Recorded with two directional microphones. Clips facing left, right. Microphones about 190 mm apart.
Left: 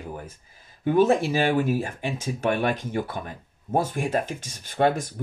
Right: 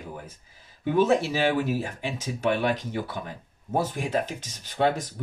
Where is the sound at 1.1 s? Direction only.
50° left (ahead or behind).